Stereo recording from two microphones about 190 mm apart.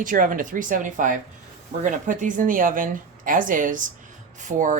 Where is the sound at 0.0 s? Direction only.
45° right (ahead or behind).